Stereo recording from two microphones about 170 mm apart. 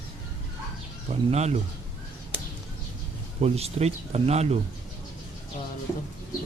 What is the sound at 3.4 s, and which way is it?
Speech, 35° right (ahead or behind).